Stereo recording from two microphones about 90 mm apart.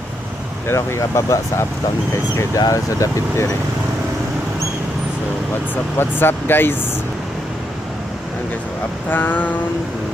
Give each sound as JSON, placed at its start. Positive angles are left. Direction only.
{"t": 0.7, "sound": "speech", "side_deg": 30}
{"t": 6.0, "sound": "speech", "side_deg": 25}
{"t": 9.0, "sound": "speech", "side_deg": 20}